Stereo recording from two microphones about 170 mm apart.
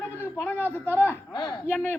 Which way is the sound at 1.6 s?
10° left (ahead or behind).